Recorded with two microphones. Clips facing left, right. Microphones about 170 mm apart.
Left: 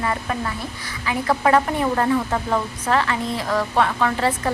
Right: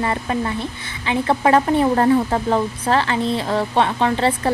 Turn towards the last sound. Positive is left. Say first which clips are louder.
# right 3 dB
turn(degrees=-30)  # may be behind; listen again after turning